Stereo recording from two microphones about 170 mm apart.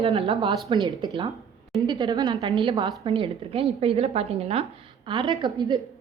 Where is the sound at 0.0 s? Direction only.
35° right (ahead or behind).